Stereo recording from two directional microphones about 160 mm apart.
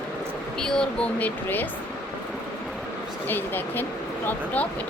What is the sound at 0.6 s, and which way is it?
A woman's voice, 5° left (ahead or behind).